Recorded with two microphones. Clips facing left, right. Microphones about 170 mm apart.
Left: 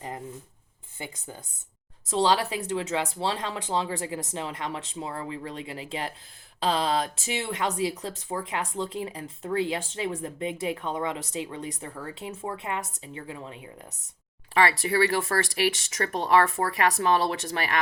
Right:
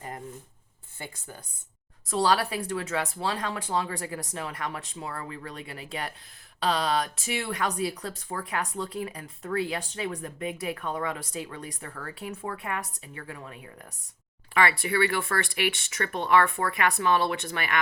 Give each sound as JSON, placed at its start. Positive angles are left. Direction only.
{"t": 0.9, "sound": "speech", "side_deg": 20}
{"t": 14.5, "sound": "speech", "side_deg": 35}